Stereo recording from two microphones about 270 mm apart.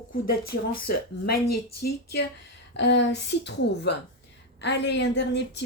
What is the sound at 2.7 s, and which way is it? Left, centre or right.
Speech, left.